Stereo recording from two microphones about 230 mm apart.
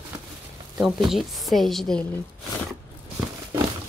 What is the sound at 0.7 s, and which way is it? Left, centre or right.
Speech, centre.